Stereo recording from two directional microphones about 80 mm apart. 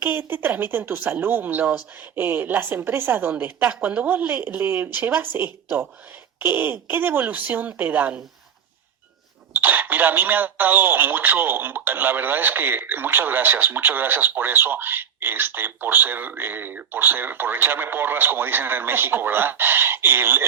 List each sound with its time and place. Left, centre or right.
0.0 s speech: right
9.6 s speech: right